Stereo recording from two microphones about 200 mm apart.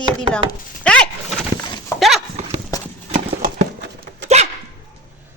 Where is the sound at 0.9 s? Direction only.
5° left (ahead or behind).